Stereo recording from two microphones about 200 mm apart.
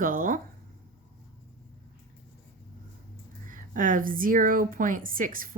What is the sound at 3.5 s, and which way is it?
A woman's voice, 40° right (ahead or behind).